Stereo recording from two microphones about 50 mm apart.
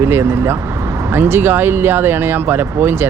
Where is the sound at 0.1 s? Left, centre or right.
Right.